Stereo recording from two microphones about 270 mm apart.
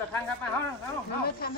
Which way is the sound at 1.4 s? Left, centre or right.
Left.